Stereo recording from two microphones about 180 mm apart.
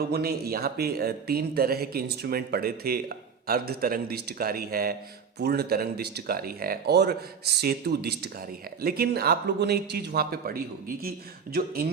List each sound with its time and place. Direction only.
0.1 s speech: 60° right (ahead or behind)